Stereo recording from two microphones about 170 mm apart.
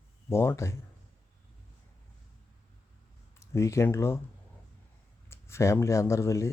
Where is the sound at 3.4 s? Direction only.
15° left (ahead or behind).